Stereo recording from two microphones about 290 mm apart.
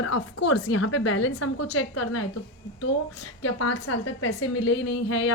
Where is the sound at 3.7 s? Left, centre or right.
Left.